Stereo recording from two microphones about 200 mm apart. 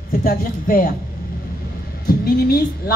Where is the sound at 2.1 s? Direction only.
50° left (ahead or behind).